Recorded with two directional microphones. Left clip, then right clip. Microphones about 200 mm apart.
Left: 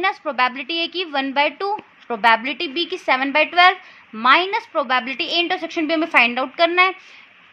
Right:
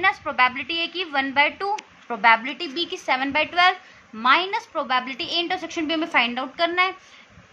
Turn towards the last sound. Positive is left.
turn(degrees=30)  # may be behind; listen again after turning